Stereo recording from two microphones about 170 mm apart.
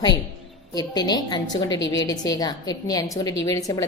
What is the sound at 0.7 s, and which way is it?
A woman's voice, 25° left (ahead or behind).